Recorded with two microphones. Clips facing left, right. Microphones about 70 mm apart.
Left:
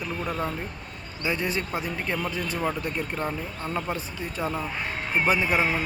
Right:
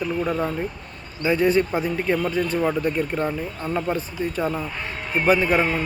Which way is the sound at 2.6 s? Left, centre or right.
Centre.